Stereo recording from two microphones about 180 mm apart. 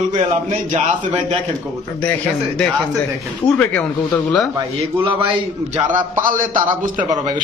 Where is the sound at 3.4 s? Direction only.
10° left (ahead or behind).